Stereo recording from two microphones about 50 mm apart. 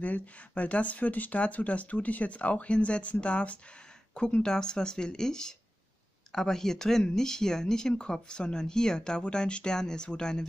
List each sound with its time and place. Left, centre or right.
0.0 s speech: left